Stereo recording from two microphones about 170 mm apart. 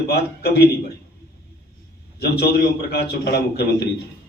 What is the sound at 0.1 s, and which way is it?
Speech, 70° left (ahead or behind).